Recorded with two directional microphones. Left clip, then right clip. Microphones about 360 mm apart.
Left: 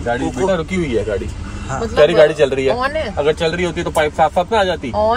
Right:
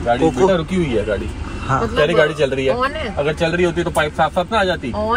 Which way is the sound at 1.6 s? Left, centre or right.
Centre.